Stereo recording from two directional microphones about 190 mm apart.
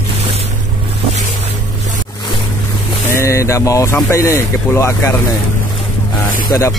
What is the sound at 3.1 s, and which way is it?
Speech, 15° left (ahead or behind).